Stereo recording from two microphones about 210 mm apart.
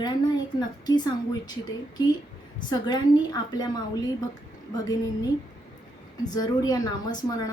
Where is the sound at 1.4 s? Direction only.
20° left (ahead or behind).